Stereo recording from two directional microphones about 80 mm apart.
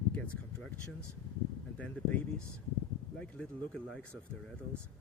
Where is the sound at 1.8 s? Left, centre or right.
Centre.